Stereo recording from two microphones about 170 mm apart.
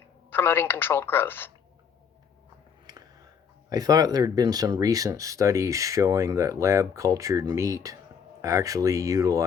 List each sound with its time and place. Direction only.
0.3 s speech: 10° left (ahead or behind)
2.8 s a sound: 25° right (ahead or behind)
3.7 s speech: 20° right (ahead or behind)